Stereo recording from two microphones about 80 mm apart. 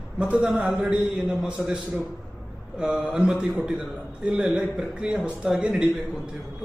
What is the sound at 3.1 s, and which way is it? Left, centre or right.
A man's voice, centre.